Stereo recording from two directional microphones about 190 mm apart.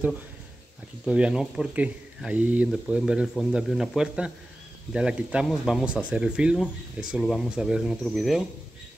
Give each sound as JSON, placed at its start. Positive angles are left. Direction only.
{"t": 1.0, "sound": "speech", "side_deg": -5}